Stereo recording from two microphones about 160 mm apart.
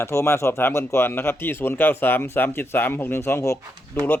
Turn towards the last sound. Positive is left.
turn(degrees=15)  # may be behind; listen again after turning